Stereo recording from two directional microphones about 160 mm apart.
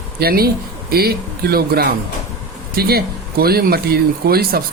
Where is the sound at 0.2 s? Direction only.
70° right (ahead or behind).